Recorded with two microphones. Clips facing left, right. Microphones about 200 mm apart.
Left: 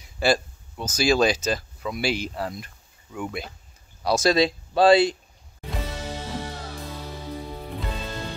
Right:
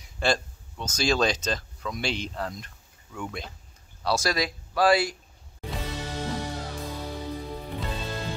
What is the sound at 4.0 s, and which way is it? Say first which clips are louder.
Speech: left 6 dB; 20° left (ahead or behind).